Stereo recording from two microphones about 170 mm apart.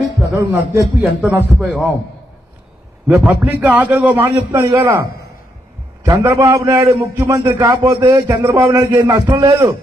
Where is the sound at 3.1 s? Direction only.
10° right (ahead or behind).